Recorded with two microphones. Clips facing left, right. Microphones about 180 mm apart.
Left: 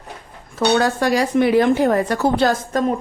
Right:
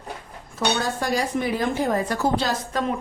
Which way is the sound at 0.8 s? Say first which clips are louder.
Left 7 dB; 70° left (ahead or behind).